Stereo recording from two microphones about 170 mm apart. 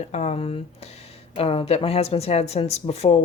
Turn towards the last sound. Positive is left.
turn(degrees=40)  # may be behind; listen again after turning